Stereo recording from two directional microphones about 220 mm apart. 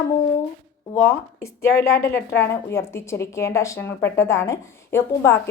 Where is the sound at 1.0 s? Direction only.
10° left (ahead or behind).